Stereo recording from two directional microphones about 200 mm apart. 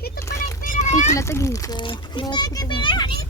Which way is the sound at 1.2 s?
15° left (ahead or behind).